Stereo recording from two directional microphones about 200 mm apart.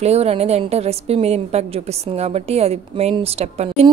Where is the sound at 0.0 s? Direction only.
30° right (ahead or behind).